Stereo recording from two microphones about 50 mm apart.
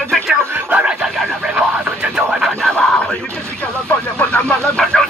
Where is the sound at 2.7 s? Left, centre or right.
Centre.